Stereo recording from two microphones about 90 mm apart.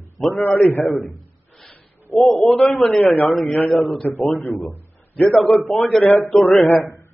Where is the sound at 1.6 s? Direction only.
15° left (ahead or behind).